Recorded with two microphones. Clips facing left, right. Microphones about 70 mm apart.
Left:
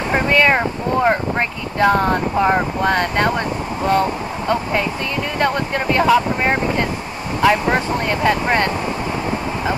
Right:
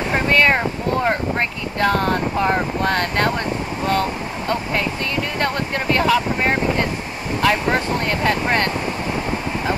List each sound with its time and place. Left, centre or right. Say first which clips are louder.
0.1 s speech: left 2 dB; centre
3.8 s speech: left 4 dB; centre